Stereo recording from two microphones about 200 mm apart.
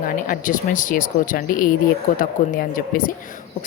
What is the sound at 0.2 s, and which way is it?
A woman's voice, 40° left (ahead or behind).